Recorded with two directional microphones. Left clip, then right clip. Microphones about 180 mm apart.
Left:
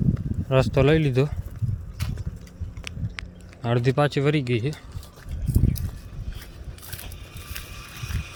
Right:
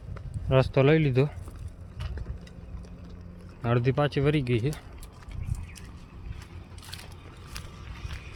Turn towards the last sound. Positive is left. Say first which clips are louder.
# left 5 dB
turn(degrees=20)  # may be behind; listen again after turning